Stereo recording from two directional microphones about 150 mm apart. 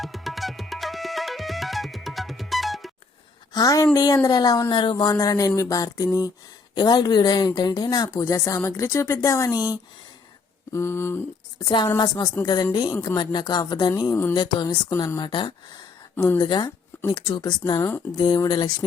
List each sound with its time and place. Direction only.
0.0 s tabla: centre (ahead or behind)
3.5 s a woman's voice: 25° left (ahead or behind)
10.7 s a sound: 20° left (ahead or behind)
11.6 s speech: 30° left (ahead or behind)
16.1 s a sound: 15° left (ahead or behind)
16.4 s speech: 30° left (ahead or behind)